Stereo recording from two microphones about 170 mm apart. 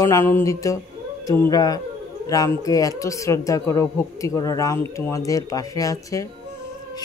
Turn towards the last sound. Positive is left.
turn(degrees=20)  # may be behind; listen again after turning